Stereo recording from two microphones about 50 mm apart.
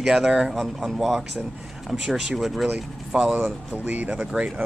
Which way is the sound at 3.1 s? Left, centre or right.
Centre.